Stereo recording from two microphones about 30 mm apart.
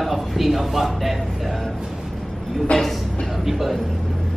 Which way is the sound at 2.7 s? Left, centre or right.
Left.